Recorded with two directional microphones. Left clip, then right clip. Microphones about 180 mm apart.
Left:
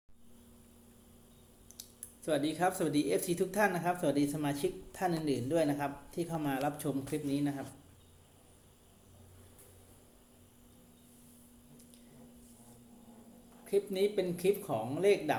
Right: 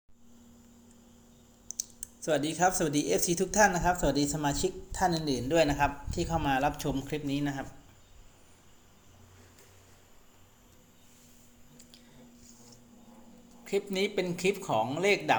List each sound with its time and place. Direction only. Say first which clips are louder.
1.7 s speech: right 13 dB; 35° right (ahead or behind)
13.7 s speech: right 1 dB; 30° right (ahead or behind)